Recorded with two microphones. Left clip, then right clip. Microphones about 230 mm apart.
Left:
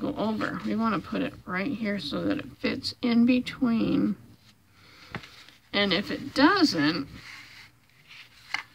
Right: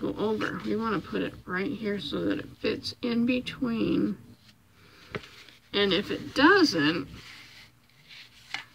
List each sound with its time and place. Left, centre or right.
0.0 s speech: left
5.7 s speech: left